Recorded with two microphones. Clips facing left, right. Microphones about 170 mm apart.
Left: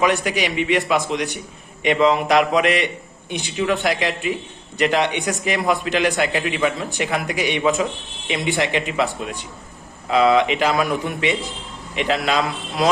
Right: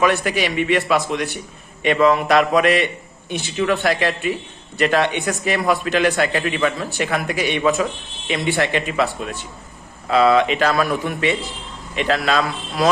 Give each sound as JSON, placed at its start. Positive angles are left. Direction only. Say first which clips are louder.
{"t": 0.0, "sound": "a man's voice", "louder": "right 1 dB", "side_deg": 15}